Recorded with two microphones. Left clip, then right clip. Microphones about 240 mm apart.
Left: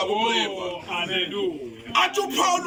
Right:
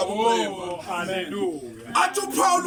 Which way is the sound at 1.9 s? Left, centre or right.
Centre.